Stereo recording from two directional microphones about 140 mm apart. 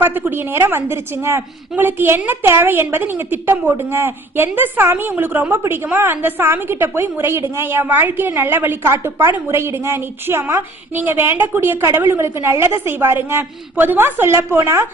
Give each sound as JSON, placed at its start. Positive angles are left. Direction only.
{"t": 0.0, "sound": "a woman's voice", "side_deg": -15}